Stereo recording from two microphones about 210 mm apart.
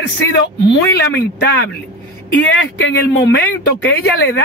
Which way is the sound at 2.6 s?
60° left (ahead or behind).